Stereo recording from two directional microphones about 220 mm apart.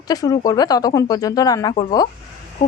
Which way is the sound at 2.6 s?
35° left (ahead or behind).